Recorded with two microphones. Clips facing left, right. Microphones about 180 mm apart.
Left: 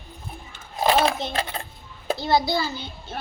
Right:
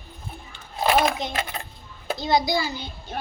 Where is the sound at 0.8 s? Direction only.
30° left (ahead or behind).